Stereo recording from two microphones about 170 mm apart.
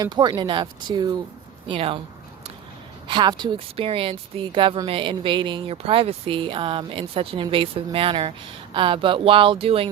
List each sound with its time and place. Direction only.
0.0 s speech: 25° right (ahead or behind)
3.1 s speech: 25° right (ahead or behind)